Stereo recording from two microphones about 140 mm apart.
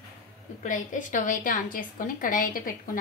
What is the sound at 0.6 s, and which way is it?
A woman's voice, 70° left (ahead or behind).